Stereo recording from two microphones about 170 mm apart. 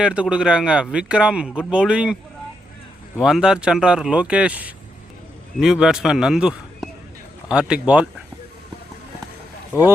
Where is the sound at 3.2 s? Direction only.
5° right (ahead or behind).